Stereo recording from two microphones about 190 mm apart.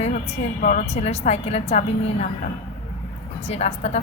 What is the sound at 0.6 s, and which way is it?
A woman's voice, 40° left (ahead or behind).